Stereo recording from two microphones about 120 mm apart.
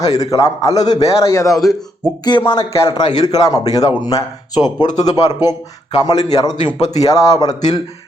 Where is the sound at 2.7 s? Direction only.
25° left (ahead or behind).